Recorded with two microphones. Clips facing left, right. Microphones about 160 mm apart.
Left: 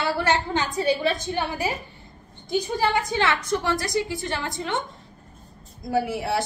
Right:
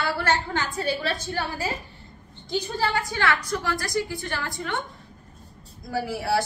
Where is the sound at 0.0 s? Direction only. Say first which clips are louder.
Left 2 dB; 20° left (ahead or behind).